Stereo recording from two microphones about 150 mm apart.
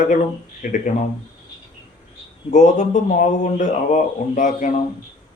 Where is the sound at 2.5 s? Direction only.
55° left (ahead or behind).